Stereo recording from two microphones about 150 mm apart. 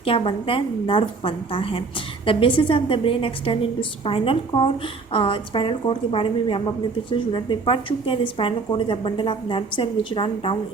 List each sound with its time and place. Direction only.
0.0 s a woman's voice: 40° left (ahead or behind)